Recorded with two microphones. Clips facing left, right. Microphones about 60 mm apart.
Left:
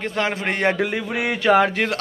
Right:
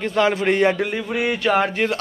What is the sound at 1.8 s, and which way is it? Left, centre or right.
Speech, left.